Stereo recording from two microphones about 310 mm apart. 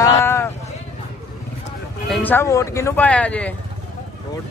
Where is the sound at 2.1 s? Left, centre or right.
Centre.